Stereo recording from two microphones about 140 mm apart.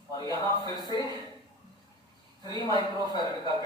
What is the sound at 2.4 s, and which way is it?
A man's voice, 30° left (ahead or behind).